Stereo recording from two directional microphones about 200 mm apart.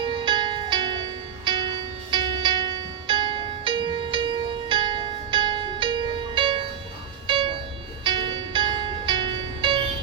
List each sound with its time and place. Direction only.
0.0 s music: 25° right (ahead or behind)